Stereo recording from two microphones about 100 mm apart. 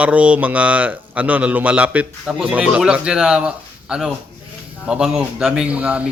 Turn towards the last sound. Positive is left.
turn(degrees=-10)  # may be behind; listen again after turning